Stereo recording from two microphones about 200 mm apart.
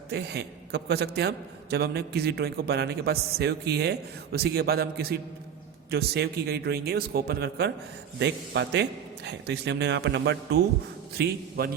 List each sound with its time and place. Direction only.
0.1 s a man's voice: 55° right (ahead or behind)
11.2 s a man's voice: 50° right (ahead or behind)